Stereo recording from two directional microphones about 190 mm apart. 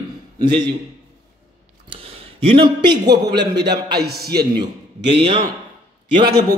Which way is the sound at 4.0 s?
55° right (ahead or behind).